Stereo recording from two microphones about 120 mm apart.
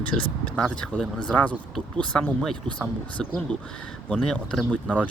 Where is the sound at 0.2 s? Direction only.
10° left (ahead or behind).